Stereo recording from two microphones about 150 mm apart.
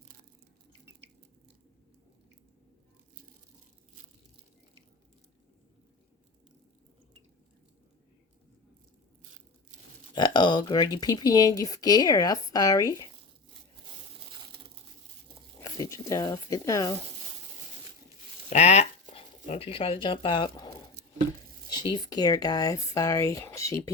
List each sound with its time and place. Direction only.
10.2 s speech: 30° left (ahead or behind)
15.6 s a sound: 20° left (ahead or behind)
18.5 s speech: 45° left (ahead or behind); by 23.9 s 20° left (ahead or behind)